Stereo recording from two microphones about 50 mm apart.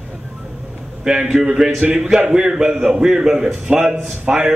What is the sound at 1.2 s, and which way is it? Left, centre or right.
A man's voice, centre.